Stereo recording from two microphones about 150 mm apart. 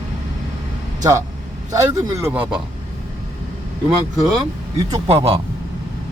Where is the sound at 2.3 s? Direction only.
10° right (ahead or behind).